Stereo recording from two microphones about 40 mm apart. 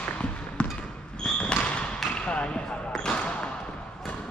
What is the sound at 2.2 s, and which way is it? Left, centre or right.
Basketball bounce, left.